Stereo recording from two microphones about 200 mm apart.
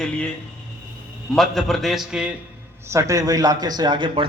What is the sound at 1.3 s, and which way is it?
A man's voice, centre (ahead or behind).